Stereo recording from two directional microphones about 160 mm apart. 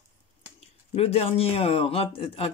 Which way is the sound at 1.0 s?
35° left (ahead or behind).